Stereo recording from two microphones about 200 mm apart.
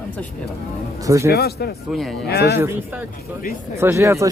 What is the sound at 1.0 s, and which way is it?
Speech, 15° right (ahead or behind).